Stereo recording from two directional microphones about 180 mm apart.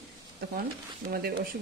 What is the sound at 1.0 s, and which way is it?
Speech, 55° right (ahead or behind).